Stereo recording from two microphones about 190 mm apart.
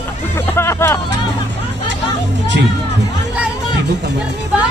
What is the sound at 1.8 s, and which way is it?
Speech, 70° right (ahead or behind).